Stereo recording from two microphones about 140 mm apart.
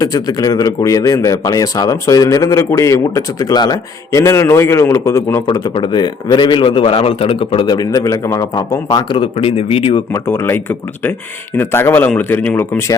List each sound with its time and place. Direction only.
0.0 s speech: 25° left (ahead or behind); by 10.0 s 40° left (ahead or behind)
10.1 s speech: 15° left (ahead or behind)